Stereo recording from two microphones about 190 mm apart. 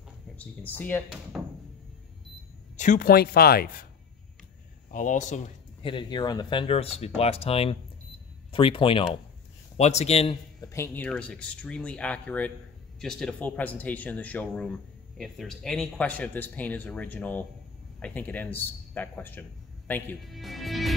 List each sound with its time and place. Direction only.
0.4 s speech: 10° left (ahead or behind)
2.8 s speech: 45° left (ahead or behind)
4.9 s a man's voice: 40° left (ahead or behind)
5.8 s a man's voice: 25° left (ahead or behind)
10.7 s speech: 10° left (ahead or behind)